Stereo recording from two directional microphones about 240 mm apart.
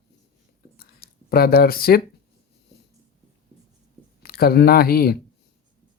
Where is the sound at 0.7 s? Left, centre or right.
Left.